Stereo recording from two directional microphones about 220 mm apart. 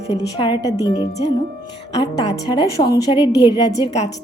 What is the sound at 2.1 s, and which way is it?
A woman's voice, 20° left (ahead or behind).